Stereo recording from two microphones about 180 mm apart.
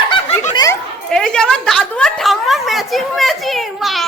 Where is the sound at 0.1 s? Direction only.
30° left (ahead or behind).